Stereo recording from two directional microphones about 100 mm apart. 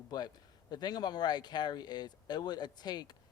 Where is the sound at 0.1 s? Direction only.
45° left (ahead or behind).